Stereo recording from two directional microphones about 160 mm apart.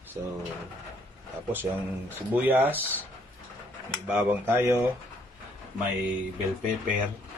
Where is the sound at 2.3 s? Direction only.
10° right (ahead or behind).